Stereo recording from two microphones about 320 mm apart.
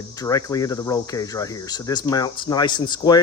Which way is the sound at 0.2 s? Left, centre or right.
Centre.